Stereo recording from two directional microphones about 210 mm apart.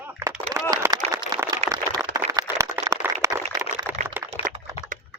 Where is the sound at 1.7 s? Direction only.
15° right (ahead or behind).